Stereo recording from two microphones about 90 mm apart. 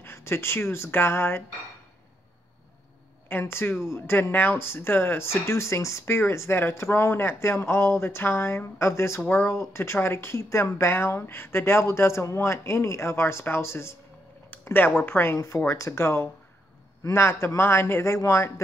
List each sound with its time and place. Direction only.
0.0 s speech: 30° left (ahead or behind)
3.3 s speech: 25° left (ahead or behind)
14.6 s a sound: 25° left (ahead or behind)
15.0 s speech: 25° left (ahead or behind)
15.3 s speech: 40° left (ahead or behind)